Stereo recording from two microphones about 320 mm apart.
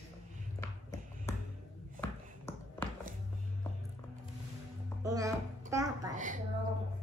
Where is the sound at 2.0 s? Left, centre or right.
Centre.